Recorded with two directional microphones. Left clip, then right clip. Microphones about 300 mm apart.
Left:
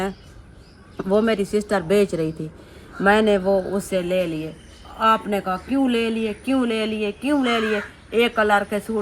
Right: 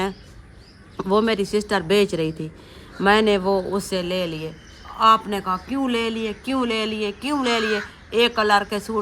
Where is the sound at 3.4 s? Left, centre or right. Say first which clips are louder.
Left 1 dB; centre.